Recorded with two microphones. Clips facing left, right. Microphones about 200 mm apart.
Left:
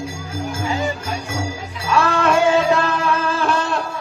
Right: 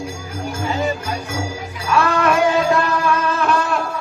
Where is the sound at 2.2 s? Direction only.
25° left (ahead or behind).